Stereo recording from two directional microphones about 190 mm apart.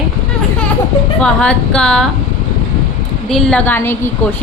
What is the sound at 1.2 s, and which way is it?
Speech, 5° left (ahead or behind).